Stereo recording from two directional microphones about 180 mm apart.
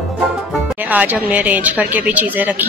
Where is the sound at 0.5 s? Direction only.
10° right (ahead or behind).